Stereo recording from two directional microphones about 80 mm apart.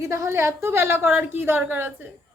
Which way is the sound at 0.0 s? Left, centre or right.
Right.